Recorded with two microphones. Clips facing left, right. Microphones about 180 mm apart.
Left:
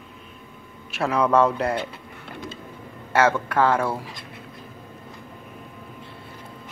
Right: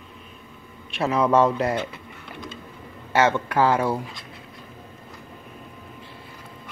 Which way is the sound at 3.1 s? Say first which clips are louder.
Even; centre (ahead or behind).